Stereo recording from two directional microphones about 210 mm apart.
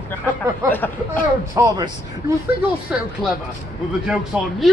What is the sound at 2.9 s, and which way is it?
Speech, 5° right (ahead or behind).